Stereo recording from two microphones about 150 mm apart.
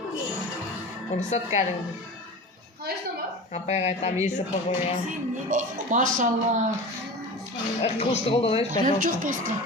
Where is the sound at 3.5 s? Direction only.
45° left (ahead or behind).